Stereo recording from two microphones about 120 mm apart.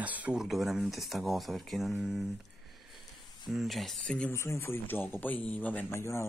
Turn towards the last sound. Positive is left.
turn(degrees=20)  # may be behind; listen again after turning